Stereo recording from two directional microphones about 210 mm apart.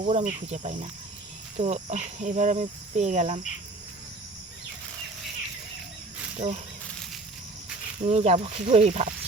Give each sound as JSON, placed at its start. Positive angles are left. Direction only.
{"t": 0.1, "sound": "speech", "side_deg": -35}
{"t": 6.3, "sound": "speech", "side_deg": -30}
{"t": 8.0, "sound": "speech", "side_deg": -30}